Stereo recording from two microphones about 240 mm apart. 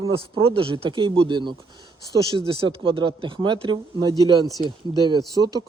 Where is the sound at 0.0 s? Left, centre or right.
Right.